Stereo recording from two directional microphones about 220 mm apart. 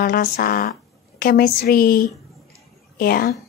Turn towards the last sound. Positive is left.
turn(degrees=45)  # may be behind; listen again after turning